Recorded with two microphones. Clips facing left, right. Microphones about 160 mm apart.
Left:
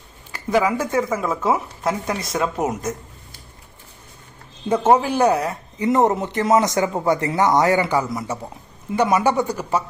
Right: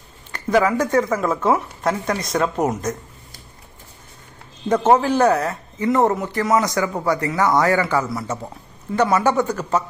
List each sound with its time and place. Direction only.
0.3 s speech: 10° left (ahead or behind)
4.7 s a man's voice: 10° left (ahead or behind)